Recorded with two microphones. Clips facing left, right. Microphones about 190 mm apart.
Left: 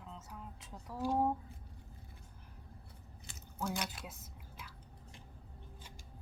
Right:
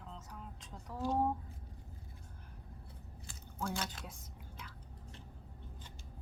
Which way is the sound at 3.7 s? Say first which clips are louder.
Even; 5° left (ahead or behind).